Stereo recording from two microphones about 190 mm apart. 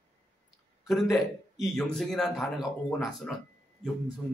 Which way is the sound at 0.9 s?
Centre (ahead or behind).